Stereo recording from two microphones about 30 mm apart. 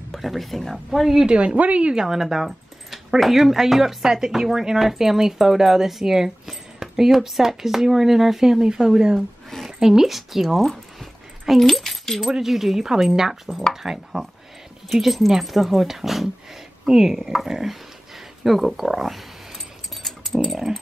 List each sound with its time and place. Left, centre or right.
0.1 s speech: centre
0.9 s speech: centre
1.2 s speech: right
2.0 s speech: centre
8.6 s speech: right; by 12.3 s centre
12.3 s speech: centre
15.0 s speech: centre
18.8 s speech: centre
20.0 s a sound: centre